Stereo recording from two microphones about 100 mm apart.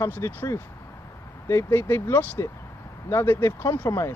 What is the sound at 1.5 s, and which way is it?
Speech, 25° left (ahead or behind).